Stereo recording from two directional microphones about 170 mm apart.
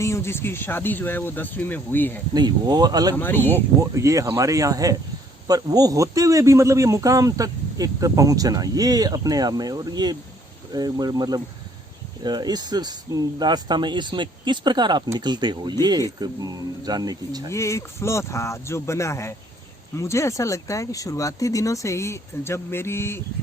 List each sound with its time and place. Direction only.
0.0 s speech: 15° left (ahead or behind)
2.3 s a man's voice: 25° right (ahead or behind)
3.2 s speech: 10° left (ahead or behind)
3.8 s a man's voice: 20° right (ahead or behind)
17.5 s speech: 15° left (ahead or behind)